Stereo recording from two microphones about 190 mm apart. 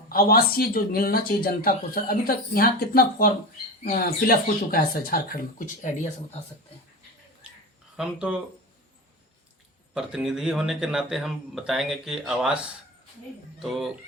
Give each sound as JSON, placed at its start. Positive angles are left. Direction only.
{"t": 0.1, "sound": "speech", "side_deg": 50}
{"t": 7.9, "sound": "speech", "side_deg": -5}
{"t": 9.9, "sound": "speech", "side_deg": -5}